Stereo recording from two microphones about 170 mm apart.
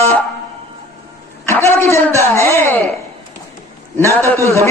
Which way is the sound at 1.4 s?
15° left (ahead or behind).